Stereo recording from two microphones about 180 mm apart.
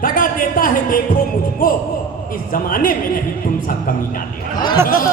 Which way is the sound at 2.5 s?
50° left (ahead or behind).